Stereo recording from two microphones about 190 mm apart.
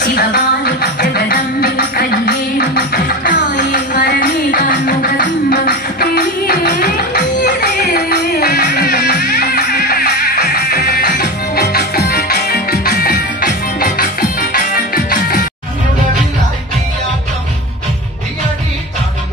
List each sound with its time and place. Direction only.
0.0 s music: 55° left (ahead or behind)